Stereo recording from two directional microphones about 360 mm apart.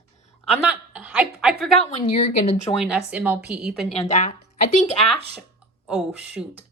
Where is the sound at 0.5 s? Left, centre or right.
Centre.